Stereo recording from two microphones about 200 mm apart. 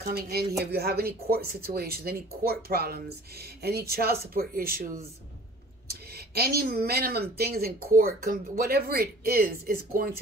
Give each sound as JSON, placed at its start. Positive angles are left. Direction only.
{"t": 0.0, "sound": "speech", "side_deg": -50}